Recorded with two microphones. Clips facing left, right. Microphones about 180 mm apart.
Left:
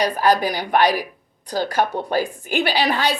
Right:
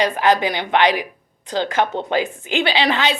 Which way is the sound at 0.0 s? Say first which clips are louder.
Right 1 dB; 25° right (ahead or behind).